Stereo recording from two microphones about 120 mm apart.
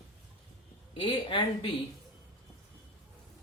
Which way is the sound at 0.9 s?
45° left (ahead or behind).